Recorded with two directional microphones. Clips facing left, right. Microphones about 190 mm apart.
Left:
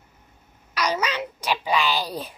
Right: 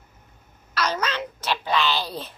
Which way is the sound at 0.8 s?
10° left (ahead or behind).